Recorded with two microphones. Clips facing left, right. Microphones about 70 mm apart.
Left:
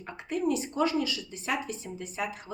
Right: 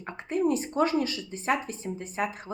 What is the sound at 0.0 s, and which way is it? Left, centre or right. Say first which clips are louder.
A woman's voice: right 3 dB; right.